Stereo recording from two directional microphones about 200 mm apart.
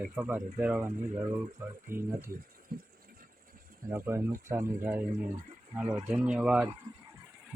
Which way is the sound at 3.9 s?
10° right (ahead or behind).